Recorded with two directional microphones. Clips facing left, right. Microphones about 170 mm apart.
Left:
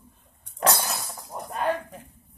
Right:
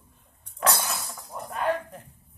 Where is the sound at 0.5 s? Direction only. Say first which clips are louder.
Left 2 dB; 40° left (ahead or behind).